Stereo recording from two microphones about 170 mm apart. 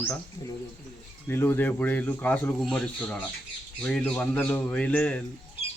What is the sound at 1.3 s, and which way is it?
Speech, 10° left (ahead or behind).